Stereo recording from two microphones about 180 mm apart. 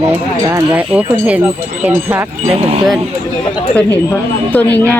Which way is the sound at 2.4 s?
35° right (ahead or behind).